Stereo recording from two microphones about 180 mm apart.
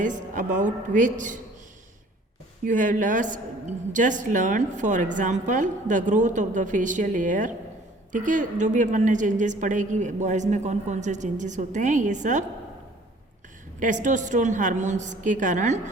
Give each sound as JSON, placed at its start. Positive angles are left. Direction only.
{"t": 0.0, "sound": "a woman's voice", "side_deg": -45}
{"t": 2.6, "sound": "a woman's voice", "side_deg": -45}
{"t": 13.7, "sound": "a woman's voice", "side_deg": -45}